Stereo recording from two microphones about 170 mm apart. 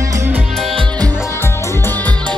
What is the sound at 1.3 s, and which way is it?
Music, 15° left (ahead or behind).